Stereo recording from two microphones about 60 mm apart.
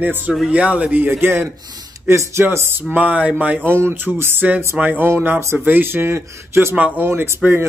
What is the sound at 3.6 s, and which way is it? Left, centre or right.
Speech, right.